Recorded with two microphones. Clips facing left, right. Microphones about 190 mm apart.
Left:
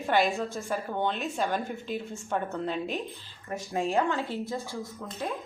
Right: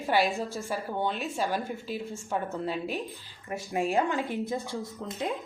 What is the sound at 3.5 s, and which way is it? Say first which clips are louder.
A woman's voice: even; 15° right (ahead or behind).